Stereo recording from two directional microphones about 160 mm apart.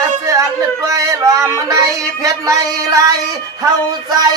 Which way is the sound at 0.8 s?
20° right (ahead or behind).